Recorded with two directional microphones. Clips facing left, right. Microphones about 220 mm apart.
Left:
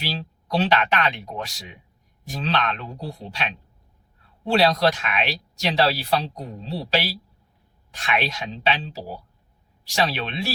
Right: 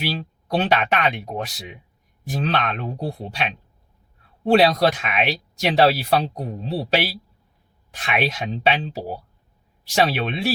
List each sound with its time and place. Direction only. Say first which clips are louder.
0.2 s speech: right 1 dB; 55° right (ahead or behind)
7.9 s speech: right 2 dB; 50° right (ahead or behind)